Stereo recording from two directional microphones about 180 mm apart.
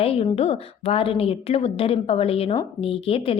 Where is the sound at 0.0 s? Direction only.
35° left (ahead or behind).